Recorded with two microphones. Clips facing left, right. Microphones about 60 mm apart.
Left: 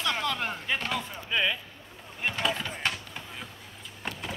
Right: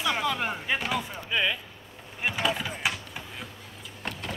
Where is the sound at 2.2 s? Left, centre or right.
Centre.